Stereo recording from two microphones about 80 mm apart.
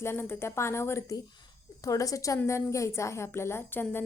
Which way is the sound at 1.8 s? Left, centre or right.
Left.